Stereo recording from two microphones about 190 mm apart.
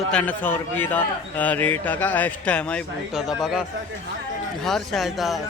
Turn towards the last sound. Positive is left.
turn(degrees=0)  # may be behind; listen again after turning